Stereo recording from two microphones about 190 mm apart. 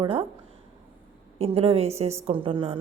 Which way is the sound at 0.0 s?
30° right (ahead or behind).